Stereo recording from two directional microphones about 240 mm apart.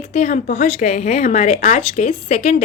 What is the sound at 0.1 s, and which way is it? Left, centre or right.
A woman's voice, left.